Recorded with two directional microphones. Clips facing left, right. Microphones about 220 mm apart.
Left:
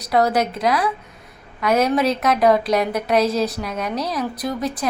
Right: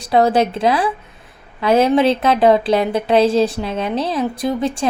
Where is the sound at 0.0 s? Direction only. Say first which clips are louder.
Right 4 dB; 25° right (ahead or behind).